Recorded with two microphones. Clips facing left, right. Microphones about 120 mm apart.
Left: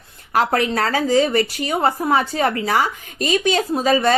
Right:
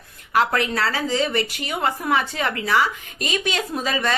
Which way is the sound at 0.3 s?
40° left (ahead or behind).